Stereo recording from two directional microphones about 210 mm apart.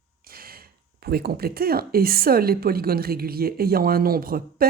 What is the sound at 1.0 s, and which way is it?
Speech, 50° right (ahead or behind).